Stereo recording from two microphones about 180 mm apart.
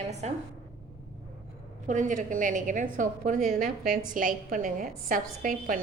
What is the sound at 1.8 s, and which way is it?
A woman's voice, 45° right (ahead or behind).